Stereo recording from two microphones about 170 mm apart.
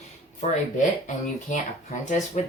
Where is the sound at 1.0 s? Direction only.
45° left (ahead or behind).